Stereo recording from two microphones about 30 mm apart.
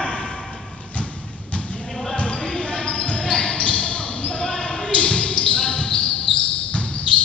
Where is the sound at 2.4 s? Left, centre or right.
Left.